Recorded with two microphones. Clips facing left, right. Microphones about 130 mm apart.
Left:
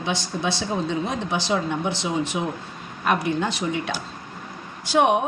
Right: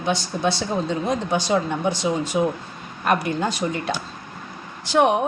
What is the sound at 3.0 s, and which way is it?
Speech, centre (ahead or behind).